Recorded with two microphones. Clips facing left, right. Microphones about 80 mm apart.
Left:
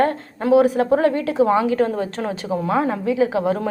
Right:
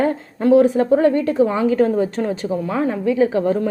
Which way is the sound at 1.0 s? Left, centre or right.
Left.